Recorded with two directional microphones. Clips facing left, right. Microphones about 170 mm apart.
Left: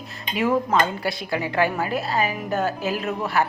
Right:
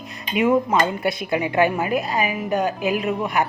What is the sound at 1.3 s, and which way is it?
A woman's voice, 20° right (ahead or behind).